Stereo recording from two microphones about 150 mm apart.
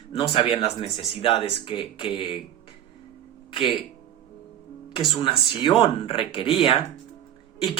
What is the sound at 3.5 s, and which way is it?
Speech, 35° left (ahead or behind).